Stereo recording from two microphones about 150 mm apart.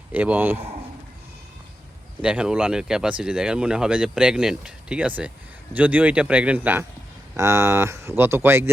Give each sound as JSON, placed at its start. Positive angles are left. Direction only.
{"t": 0.1, "sound": "speech", "side_deg": -10}
{"t": 2.2, "sound": "speech", "side_deg": -5}